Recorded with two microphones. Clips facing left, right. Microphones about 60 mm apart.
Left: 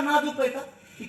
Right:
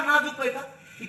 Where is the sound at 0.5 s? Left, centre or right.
Right.